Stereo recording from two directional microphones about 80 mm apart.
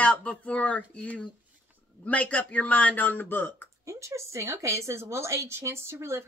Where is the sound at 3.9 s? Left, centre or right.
Right.